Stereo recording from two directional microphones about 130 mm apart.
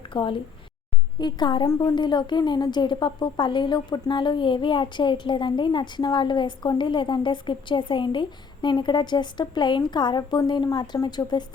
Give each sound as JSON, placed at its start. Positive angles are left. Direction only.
{"t": 0.1, "sound": "a woman's voice", "side_deg": 40}